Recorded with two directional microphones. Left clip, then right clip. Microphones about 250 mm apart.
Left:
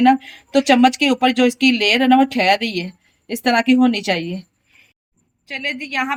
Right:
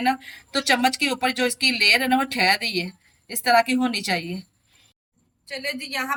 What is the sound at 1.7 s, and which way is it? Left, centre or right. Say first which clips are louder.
Speech: left 1 dB; left.